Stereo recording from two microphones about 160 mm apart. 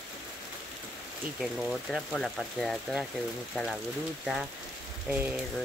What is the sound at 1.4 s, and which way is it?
Speech, centre (ahead or behind).